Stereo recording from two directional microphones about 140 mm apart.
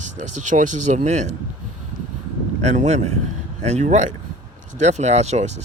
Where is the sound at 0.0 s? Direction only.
60° right (ahead or behind).